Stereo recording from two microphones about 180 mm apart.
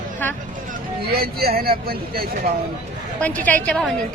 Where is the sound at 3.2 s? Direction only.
10° left (ahead or behind).